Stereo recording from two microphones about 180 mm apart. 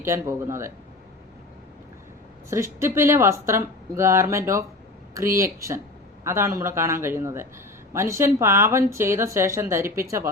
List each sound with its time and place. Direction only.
0.0 s speech: 15° right (ahead or behind)
2.5 s speech: 15° right (ahead or behind)